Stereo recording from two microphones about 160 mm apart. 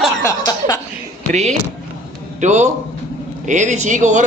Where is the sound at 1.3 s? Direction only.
45° right (ahead or behind).